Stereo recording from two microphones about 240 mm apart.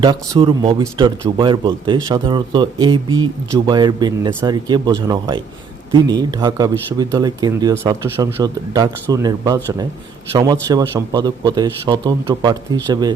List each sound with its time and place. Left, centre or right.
0.0 s speech: centre